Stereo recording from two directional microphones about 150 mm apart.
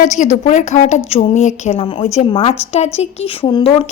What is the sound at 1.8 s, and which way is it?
A woman's voice, 40° left (ahead or behind).